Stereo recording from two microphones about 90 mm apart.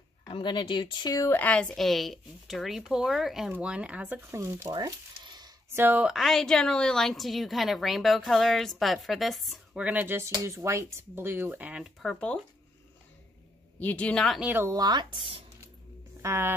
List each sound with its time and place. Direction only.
0.3 s speech: 60° left (ahead or behind)
1.3 s a woman's voice: 15° left (ahead or behind); by 4.2 s 15° right (ahead or behind)
4.3 s speech: 30° right (ahead or behind)
4.7 s frying: 50° right (ahead or behind)
5.7 s speech: 25° right (ahead or behind)
6.1 s a woman's voice: centre (ahead or behind)
9.8 s speech: 15° right (ahead or behind)
12.0 s speech: 10° left (ahead or behind)
13.7 s speech: 15° left (ahead or behind)
14.4 s speech: 20° right (ahead or behind)
14.7 s speech: 50° right (ahead or behind)
16.2 s speech: 30° right (ahead or behind)